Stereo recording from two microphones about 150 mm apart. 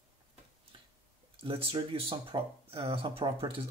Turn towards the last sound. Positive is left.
turn(degrees=-40)  # may be behind; listen again after turning